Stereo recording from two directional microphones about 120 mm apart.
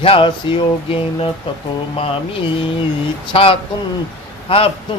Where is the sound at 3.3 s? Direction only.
50° left (ahead or behind).